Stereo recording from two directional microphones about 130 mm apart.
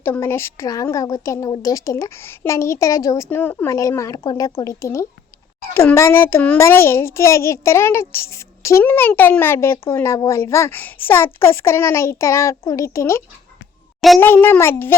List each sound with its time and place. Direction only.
0.0 s a child's voice: 20° left (ahead or behind)
3.2 s child singing: 15° left (ahead or behind)
3.8 s a child's voice: 25° left (ahead or behind)
14.2 s child singing: 15° left (ahead or behind)